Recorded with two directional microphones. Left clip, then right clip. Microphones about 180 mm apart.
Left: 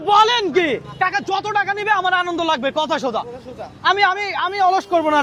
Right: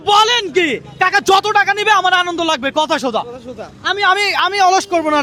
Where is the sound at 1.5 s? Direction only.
35° right (ahead or behind).